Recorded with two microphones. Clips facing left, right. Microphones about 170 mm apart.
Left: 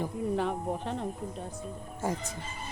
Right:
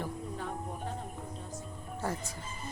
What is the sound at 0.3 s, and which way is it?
Speech, 80° left.